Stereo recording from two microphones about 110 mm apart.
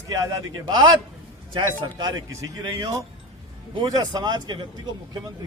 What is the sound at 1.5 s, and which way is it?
Speech, 45° right (ahead or behind).